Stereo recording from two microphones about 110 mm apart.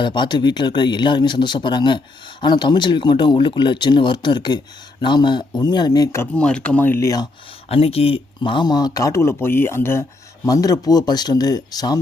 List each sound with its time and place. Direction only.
0.0 s speech: 45° left (ahead or behind); by 6.2 s 30° left (ahead or behind)
6.3 s speech: 10° left (ahead or behind)
7.0 s speech: 35° left (ahead or behind)
7.7 s speech: 65° left (ahead or behind); by 11.9 s 35° left (ahead or behind)